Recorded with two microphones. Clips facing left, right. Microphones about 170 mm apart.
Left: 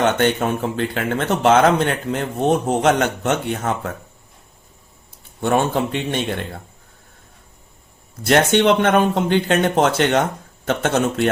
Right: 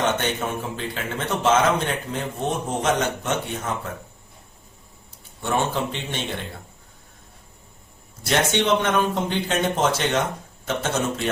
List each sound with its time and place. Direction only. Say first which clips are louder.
0.0 s speech: left 6 dB; 65° left (ahead or behind)
5.4 s speech: left 5 dB; 55° left (ahead or behind)
8.2 s speech: left 7 dB; 60° left (ahead or behind)